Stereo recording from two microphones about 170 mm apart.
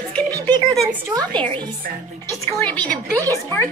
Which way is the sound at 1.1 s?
25° right (ahead or behind).